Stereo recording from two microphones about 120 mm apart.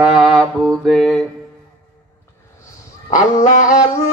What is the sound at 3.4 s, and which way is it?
Dog, 90° left.